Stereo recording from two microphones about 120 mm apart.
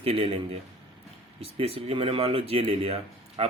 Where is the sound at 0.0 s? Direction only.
55° right (ahead or behind).